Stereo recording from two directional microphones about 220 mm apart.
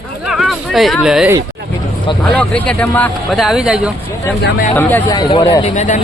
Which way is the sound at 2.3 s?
5° left (ahead or behind).